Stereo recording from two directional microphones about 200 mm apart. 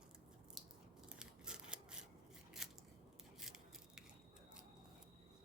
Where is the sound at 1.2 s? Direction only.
5° right (ahead or behind).